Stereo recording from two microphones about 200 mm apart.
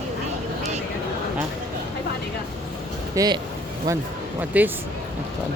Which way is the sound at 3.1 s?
20° right (ahead or behind).